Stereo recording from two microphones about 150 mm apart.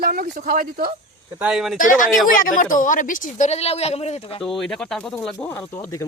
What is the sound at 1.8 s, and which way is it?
Speech, 65° left (ahead or behind).